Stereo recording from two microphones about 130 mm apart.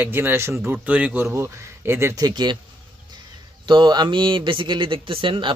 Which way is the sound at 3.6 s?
35° right (ahead or behind).